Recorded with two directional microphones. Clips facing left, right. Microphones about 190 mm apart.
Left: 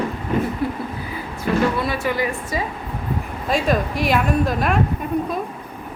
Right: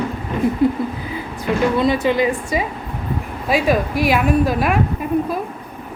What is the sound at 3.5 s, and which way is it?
A woman's voice, 5° right (ahead or behind).